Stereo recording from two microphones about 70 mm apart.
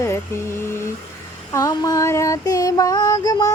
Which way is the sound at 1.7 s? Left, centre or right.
Left.